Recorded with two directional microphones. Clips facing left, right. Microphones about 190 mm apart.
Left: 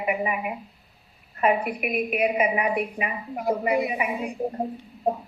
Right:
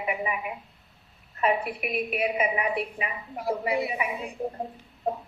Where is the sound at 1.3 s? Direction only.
50° left (ahead or behind).